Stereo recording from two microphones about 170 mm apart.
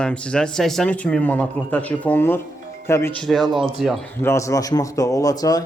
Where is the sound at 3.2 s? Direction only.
Centre (ahead or behind).